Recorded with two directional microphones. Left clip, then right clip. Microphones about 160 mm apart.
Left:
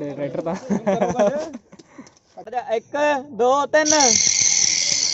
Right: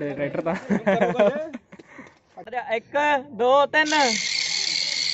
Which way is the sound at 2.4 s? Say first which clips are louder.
Left 3 dB; 60° left (ahead or behind).